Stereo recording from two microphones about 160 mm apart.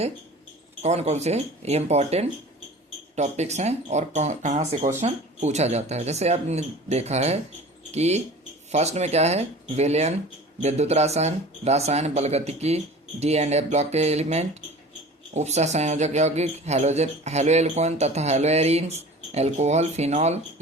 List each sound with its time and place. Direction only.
0.8 s speech: 45° right (ahead or behind)